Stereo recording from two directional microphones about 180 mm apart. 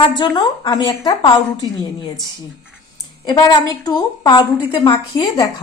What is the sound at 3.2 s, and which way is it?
A woman's voice, 25° left (ahead or behind).